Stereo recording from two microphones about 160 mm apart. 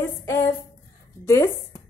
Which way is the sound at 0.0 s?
15° left (ahead or behind).